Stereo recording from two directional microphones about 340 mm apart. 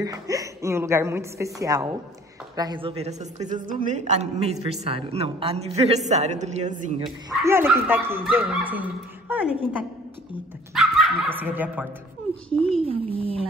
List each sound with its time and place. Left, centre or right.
0.0 s a woman's voice: centre
7.4 s a woman's voice: centre
12.8 s a woman's voice: centre